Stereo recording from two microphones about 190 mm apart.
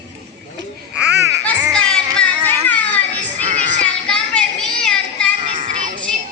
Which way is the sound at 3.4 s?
35° right (ahead or behind).